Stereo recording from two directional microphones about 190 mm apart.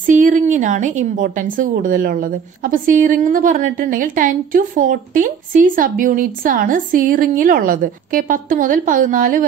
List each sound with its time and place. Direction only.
0.0 s a woman's voice: 45° right (ahead or behind)